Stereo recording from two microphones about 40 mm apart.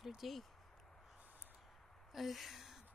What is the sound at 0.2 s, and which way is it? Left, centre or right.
Speech, centre.